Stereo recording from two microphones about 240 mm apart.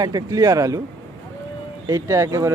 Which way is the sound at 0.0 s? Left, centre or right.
Centre.